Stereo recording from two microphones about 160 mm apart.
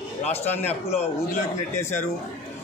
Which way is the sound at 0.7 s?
40° left (ahead or behind).